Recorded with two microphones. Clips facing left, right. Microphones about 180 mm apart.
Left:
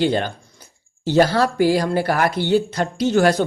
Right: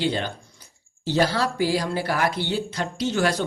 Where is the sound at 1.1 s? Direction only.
50° left (ahead or behind).